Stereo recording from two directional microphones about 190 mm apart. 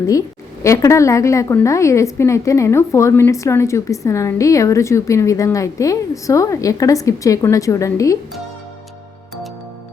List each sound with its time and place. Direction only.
0.1 s a woman's voice: 15° left (ahead or behind)